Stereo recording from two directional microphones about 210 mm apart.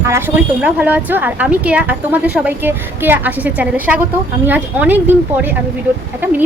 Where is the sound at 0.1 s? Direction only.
10° right (ahead or behind).